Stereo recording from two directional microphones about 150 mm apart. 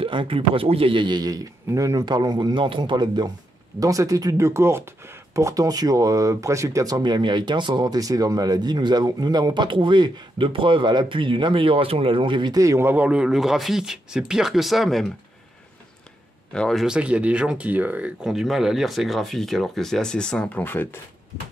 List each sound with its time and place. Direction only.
0.0 s speech: 35° right (ahead or behind); by 15.0 s centre (ahead or behind)
16.5 s speech: centre (ahead or behind)